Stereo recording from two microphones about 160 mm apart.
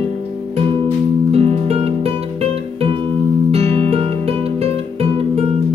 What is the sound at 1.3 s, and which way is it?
Music, 40° right (ahead or behind).